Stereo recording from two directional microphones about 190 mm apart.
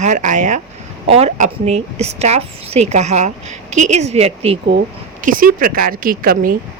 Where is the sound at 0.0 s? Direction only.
40° right (ahead or behind).